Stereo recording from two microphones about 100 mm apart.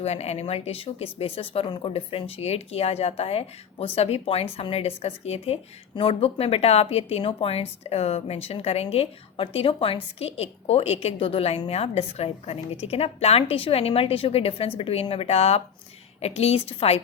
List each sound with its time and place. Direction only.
0.0 s a woman's voice: 90° left
6.0 s a woman's voice: 80° left
7.2 s a woman's voice: 75° left (ahead or behind)